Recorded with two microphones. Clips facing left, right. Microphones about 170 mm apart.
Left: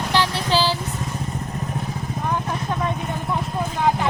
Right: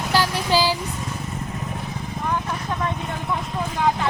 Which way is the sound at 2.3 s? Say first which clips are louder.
Left 1 dB; 20° left (ahead or behind).